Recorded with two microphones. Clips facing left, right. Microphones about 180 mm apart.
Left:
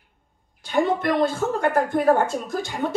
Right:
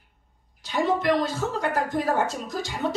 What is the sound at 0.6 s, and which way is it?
Speech, 55° left (ahead or behind).